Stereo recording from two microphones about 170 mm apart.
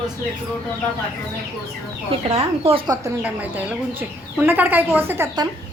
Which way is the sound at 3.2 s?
10° right (ahead or behind).